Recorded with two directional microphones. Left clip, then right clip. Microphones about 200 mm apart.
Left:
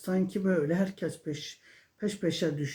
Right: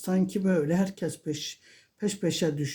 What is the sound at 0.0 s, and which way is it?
Speech, 45° right (ahead or behind).